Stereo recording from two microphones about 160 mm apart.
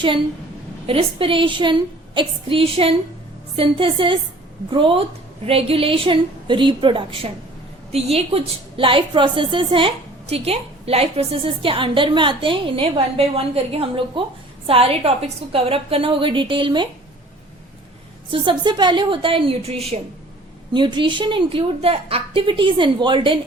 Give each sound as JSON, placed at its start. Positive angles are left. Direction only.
{"t": 0.9, "sound": "a woman's voice", "side_deg": -35}
{"t": 18.3, "sound": "a woman's voice", "side_deg": -30}